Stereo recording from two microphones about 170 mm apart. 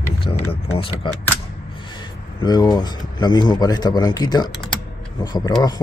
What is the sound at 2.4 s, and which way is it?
Speech, 25° left (ahead or behind).